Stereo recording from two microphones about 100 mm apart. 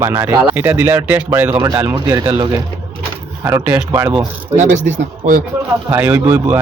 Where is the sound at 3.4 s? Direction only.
25° right (ahead or behind).